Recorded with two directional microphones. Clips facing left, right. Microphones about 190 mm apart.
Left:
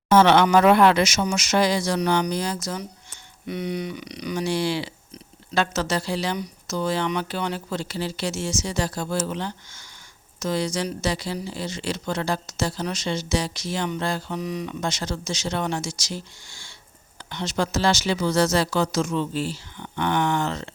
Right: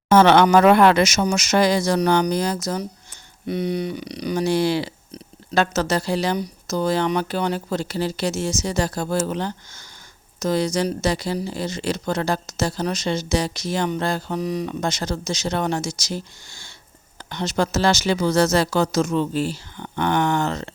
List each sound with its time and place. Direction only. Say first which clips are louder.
0.1 s speech: right 3 dB; 50° right (ahead or behind)